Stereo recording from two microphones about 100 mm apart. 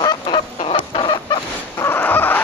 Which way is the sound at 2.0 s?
20° left (ahead or behind).